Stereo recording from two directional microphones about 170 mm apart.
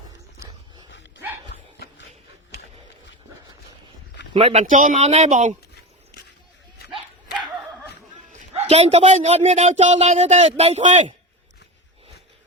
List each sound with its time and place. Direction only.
0.9 s dog: 90° left
4.4 s speech: 35° right (ahead or behind)
4.6 s speech: 50° right (ahead or behind)
8.5 s speech: 40° right (ahead or behind)